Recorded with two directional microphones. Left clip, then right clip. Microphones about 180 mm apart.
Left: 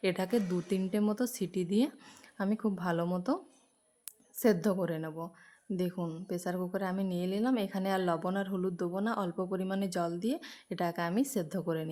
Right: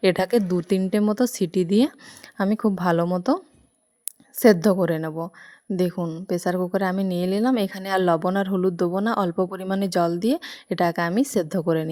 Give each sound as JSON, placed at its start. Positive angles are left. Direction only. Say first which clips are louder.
{"t": 0.0, "sound": "a woman's voice", "louder": "right 12 dB", "side_deg": -40}